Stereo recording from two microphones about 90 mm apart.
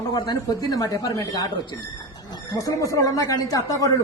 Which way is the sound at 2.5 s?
40° left (ahead or behind).